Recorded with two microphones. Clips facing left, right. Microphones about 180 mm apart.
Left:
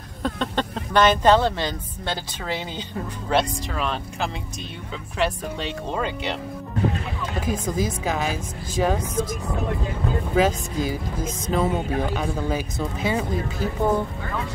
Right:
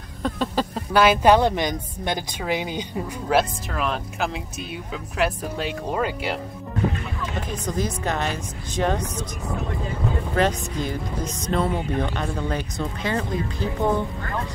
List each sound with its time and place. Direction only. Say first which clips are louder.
0.2 s a woman's voice: right 1 dB; 5° right (ahead or behind)
7.6 s a woman's voice: left 1 dB; 5° left (ahead or behind)
9.1 s speech: left 7 dB; 90° left
10.2 s a woman's voice: left 2 dB; 5° left (ahead or behind)